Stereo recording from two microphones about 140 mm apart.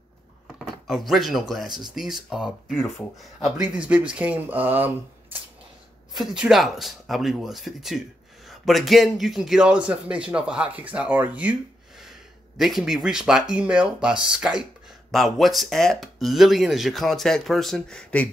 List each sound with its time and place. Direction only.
0.6 s a sound: centre (ahead or behind)
1.5 s a man's voice: centre (ahead or behind)
6.1 s a man's voice: 5° right (ahead or behind)